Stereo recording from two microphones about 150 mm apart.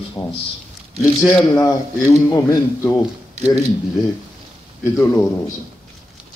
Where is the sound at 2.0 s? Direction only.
20° left (ahead or behind).